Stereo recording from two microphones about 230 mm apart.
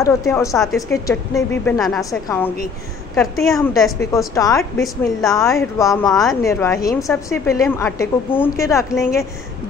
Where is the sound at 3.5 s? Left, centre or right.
Centre.